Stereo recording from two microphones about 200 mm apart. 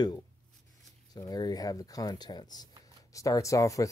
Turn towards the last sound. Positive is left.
turn(degrees=15)  # may be behind; listen again after turning